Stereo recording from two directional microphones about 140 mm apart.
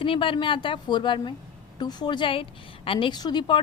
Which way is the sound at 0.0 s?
40° left (ahead or behind).